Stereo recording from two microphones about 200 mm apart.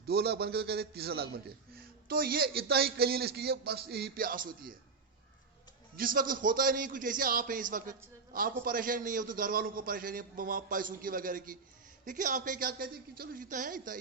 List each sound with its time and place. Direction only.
0.0 s a man's voice: 55° right (ahead or behind)
6.0 s a man's voice: 45° right (ahead or behind)